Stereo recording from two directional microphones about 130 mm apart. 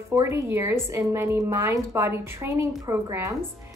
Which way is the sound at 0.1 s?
20° right (ahead or behind).